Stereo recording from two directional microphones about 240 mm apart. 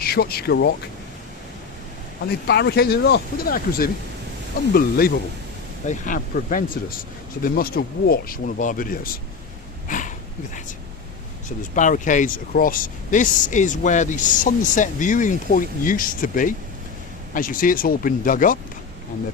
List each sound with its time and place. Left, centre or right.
0.0 s speech: left
2.5 s speech: left
9.9 s a sound: left
11.4 s speech: left